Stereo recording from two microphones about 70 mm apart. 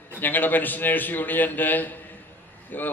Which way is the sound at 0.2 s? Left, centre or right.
Left.